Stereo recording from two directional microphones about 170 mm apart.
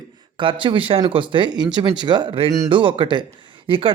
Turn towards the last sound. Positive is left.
turn(degrees=-30)  # may be behind; listen again after turning